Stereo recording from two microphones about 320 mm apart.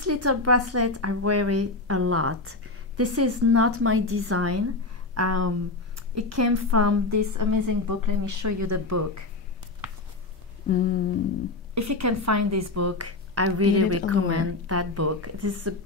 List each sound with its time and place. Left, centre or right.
0.0 s a woman's voice: right
10.7 s humming: left
11.7 s a woman's voice: right